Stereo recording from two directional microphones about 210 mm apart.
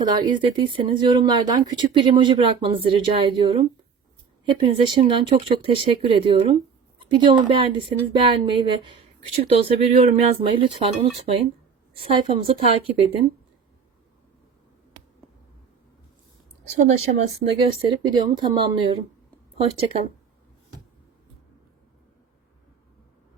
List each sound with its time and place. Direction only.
0.0 s speech: 20° right (ahead or behind)
12.5 s speech: 25° right (ahead or behind)
16.7 s speech: 30° right (ahead or behind)